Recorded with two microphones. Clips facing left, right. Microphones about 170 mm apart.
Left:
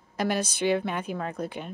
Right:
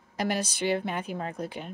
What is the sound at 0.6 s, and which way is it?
A woman's voice, 55° left (ahead or behind).